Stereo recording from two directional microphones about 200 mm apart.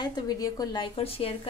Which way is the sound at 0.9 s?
30° left (ahead or behind).